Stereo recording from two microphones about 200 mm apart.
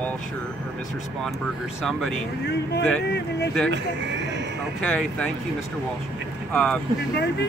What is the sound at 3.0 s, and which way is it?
Speech, 55° left (ahead or behind).